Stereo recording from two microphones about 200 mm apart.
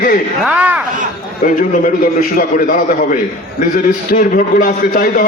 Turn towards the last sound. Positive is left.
turn(degrees=45)  # may be behind; listen again after turning